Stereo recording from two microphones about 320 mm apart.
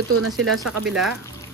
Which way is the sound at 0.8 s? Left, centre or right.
Centre.